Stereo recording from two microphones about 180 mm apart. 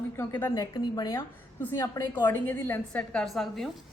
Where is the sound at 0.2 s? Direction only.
15° left (ahead or behind).